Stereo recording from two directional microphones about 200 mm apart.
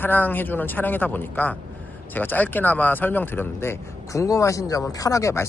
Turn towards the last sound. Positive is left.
turn(degrees=15)  # may be behind; listen again after turning